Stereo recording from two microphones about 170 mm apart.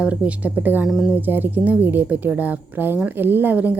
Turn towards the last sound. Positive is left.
turn(degrees=-10)  # may be behind; listen again after turning